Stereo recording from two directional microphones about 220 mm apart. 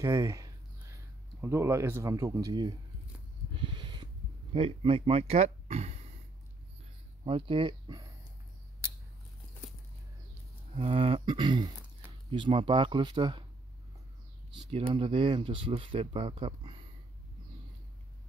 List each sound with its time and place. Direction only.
0.0 s a sound: 15° right (ahead or behind)
1.4 s speech: 10° right (ahead or behind)
3.5 s a sound: 20° right (ahead or behind)
7.2 s speech: 25° right (ahead or behind)
10.7 s speech: 25° right (ahead or behind)
14.7 s speech: 25° right (ahead or behind)